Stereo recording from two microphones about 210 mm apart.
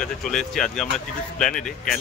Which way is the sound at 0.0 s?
Centre (ahead or behind).